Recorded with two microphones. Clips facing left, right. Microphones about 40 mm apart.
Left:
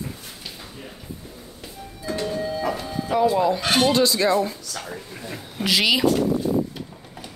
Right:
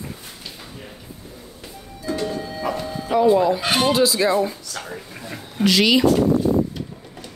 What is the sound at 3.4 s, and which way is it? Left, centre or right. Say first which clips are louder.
A woman's voice: right 1 dB; centre.